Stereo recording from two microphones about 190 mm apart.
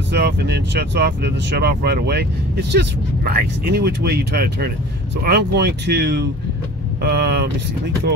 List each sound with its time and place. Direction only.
0.1 s speech: 60° right (ahead or behind)